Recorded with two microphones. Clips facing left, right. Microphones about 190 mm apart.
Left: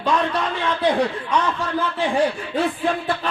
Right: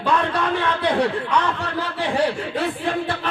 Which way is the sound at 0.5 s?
65° right (ahead or behind).